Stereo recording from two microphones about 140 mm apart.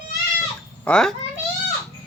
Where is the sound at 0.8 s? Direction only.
5° left (ahead or behind).